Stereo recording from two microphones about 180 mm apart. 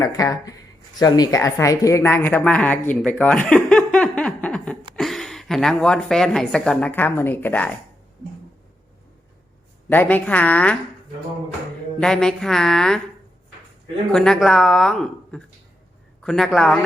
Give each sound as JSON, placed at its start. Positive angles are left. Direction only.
{"t": 0.0, "sound": "a woman's voice", "side_deg": 20}
{"t": 9.9, "sound": "a woman's voice", "side_deg": 10}
{"t": 11.9, "sound": "speech", "side_deg": 5}
{"t": 14.1, "sound": "speech", "side_deg": 5}